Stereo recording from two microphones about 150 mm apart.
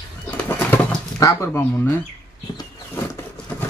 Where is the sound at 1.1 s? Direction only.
20° left (ahead or behind).